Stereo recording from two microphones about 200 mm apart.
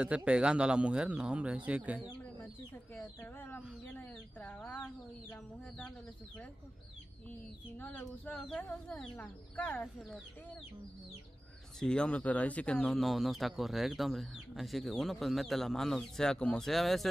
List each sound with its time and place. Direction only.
0.0 s speech: 5° right (ahead or behind)
2.7 s speech: 10° left (ahead or behind)
11.8 s speech: 5° left (ahead or behind)